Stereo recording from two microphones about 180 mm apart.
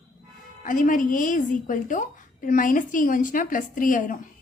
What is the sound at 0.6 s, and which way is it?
A woman's voice, 45° left (ahead or behind).